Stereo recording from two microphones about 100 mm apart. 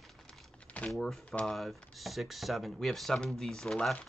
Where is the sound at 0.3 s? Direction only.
10° left (ahead or behind).